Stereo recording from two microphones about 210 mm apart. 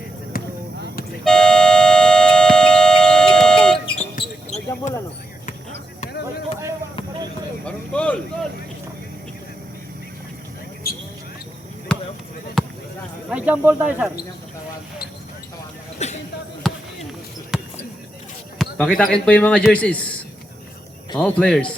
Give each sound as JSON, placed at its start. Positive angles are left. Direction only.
{"t": 0.3, "sound": "basketball bounce", "side_deg": 45}
{"t": 1.2, "sound": "music", "side_deg": 5}
{"t": 3.9, "sound": "basketball bounce", "side_deg": 35}
{"t": 7.6, "sound": "a sound", "side_deg": 5}
{"t": 10.8, "sound": "a sound", "side_deg": 45}
{"t": 12.6, "sound": "basketball bounce", "side_deg": 0}
{"t": 13.3, "sound": "speech", "side_deg": -5}
{"t": 16.0, "sound": "basketball bounce", "side_deg": 30}
{"t": 16.7, "sound": "basketball bounce", "side_deg": 0}
{"t": 17.5, "sound": "a sound", "side_deg": 0}
{"t": 18.6, "sound": "speech", "side_deg": 5}
{"t": 21.2, "sound": "speech", "side_deg": 5}